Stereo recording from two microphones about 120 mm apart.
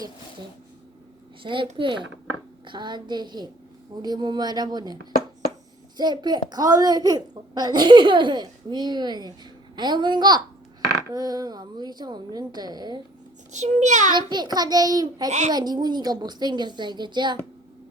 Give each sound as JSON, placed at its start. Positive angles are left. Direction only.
{"t": 1.4, "sound": "a child's voice", "side_deg": -45}
{"t": 6.0, "sound": "a child's voice", "side_deg": -35}
{"t": 13.5, "sound": "a child's voice", "side_deg": -80}
{"t": 14.1, "sound": "a child's voice", "side_deg": -40}
{"t": 15.3, "sound": "a child's voice", "side_deg": -80}
{"t": 15.5, "sound": "a child's voice", "side_deg": -35}